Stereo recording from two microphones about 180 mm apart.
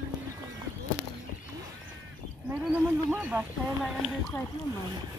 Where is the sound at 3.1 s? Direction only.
10° right (ahead or behind).